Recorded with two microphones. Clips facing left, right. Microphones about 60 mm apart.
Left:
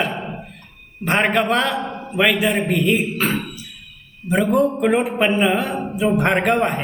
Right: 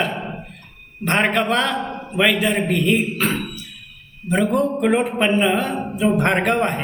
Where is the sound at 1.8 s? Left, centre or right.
Centre.